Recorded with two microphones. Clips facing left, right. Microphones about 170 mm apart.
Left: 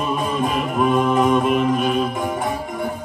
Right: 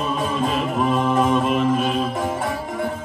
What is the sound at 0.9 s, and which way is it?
Mantra, 15° left (ahead or behind).